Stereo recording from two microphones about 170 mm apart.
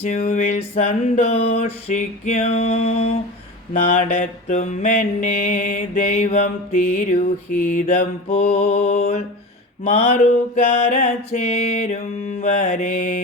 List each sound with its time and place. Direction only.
0.1 s mantra: 45° left (ahead or behind)
0.9 s male singing: 35° left (ahead or behind)
3.7 s mantra: 50° left (ahead or behind)
9.8 s male singing: 40° left (ahead or behind)
12.4 s mantra: 45° left (ahead or behind)